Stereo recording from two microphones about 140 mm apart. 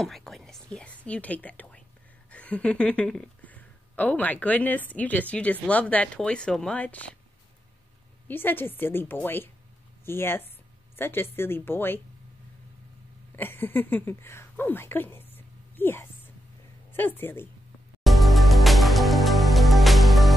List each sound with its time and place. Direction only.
0.0 s speech: centre (ahead or behind)
8.3 s speech: 15° left (ahead or behind)
13.4 s speech: 15° left (ahead or behind)
15.3 s a sound: 15° left (ahead or behind)
16.9 s speech: 15° left (ahead or behind)
18.0 s music: centre (ahead or behind)